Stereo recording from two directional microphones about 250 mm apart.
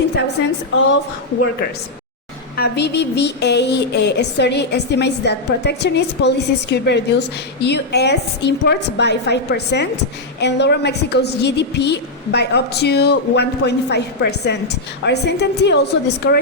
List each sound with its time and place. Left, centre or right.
2.6 s a woman's voice: left